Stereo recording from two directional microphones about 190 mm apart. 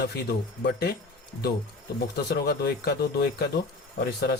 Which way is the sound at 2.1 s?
60° left (ahead or behind).